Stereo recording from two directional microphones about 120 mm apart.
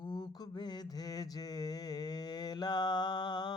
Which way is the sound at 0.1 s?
35° left (ahead or behind).